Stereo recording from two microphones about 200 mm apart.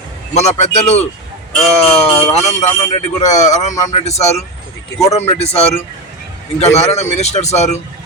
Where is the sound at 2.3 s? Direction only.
35° left (ahead or behind).